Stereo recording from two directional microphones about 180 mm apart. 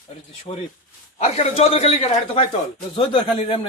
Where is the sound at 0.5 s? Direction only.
35° left (ahead or behind).